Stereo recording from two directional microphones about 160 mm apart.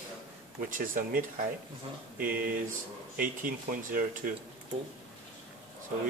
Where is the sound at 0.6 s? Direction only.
60° right (ahead or behind).